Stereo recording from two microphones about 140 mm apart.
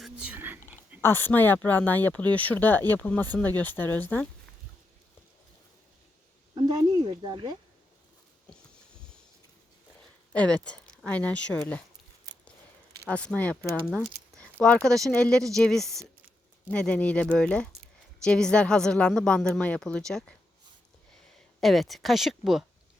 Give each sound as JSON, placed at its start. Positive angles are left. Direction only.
{"t": 0.0, "sound": "whispering", "side_deg": -10}
{"t": 1.0, "sound": "speech", "side_deg": 15}
{"t": 6.5, "sound": "speech", "side_deg": -35}
{"t": 10.3, "sound": "speech", "side_deg": 10}
{"t": 13.1, "sound": "speech", "side_deg": 10}
{"t": 21.6, "sound": "speech", "side_deg": 0}